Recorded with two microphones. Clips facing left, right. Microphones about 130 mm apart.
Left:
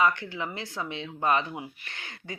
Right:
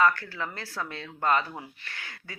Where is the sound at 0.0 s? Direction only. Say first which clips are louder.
Right 1 dB; 20° left (ahead or behind).